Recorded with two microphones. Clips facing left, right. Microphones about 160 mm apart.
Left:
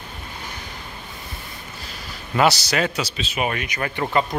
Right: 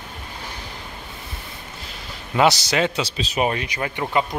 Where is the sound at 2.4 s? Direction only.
20° right (ahead or behind).